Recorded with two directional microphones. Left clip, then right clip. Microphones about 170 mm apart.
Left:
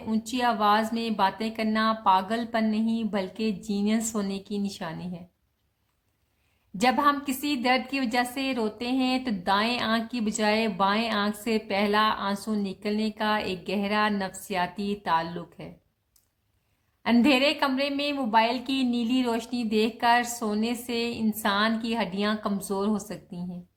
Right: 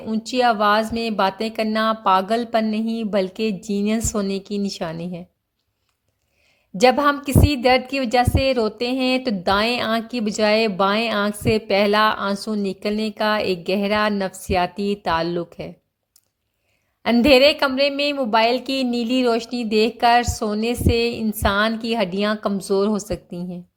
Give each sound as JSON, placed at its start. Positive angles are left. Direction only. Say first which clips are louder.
{"t": 0.1, "sound": "a woman's voice", "louder": "right 8 dB", "side_deg": -30}
{"t": 6.7, "sound": "a woman's voice", "louder": "right 7 dB", "side_deg": -40}
{"t": 17.0, "sound": "a woman's voice", "louder": "right 9 dB", "side_deg": -40}